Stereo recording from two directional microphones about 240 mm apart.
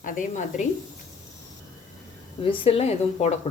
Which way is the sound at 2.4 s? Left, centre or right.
Left.